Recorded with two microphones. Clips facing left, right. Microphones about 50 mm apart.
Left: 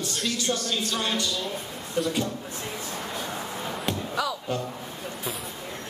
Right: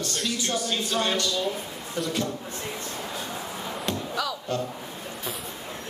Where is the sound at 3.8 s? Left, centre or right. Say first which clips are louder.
Left 1 dB; centre.